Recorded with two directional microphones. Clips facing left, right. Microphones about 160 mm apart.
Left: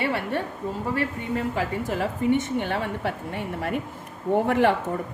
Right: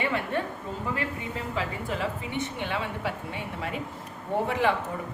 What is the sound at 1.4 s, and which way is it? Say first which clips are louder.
A woman's voice: left 6 dB; 50° left (ahead or behind).